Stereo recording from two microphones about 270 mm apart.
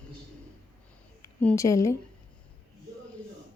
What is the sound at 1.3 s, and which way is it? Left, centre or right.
Speech, centre.